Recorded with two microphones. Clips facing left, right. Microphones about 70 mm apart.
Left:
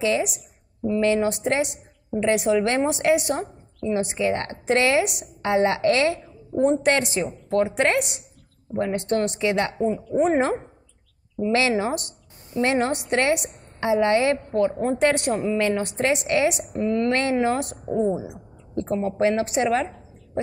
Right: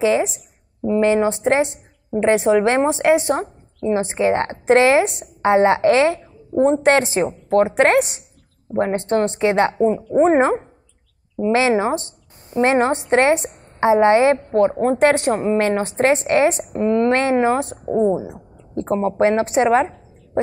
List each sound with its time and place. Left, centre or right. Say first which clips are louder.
0.0 s a woman's voice: right 5 dB; right
9.8 s a woman's voice: right 6 dB; right
14.3 s a woman's voice: right 5 dB; right